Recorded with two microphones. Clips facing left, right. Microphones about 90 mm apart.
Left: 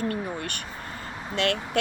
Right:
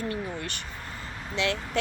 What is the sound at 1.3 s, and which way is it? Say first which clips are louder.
Speech: left 2 dB; 55° left (ahead or behind).